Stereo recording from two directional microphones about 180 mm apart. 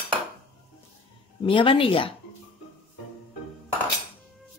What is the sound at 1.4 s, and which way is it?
Speech, 30° left (ahead or behind).